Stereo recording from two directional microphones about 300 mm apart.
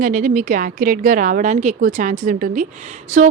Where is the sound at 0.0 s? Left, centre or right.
Right.